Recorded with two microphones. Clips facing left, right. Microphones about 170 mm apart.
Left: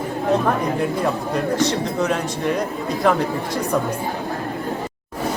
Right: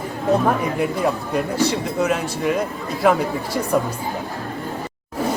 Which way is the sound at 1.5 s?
10° right (ahead or behind).